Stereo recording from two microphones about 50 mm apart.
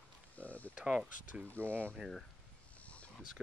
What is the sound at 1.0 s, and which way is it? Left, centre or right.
Speech, right.